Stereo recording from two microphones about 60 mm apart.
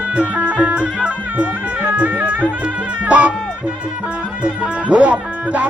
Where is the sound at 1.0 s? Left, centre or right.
Right.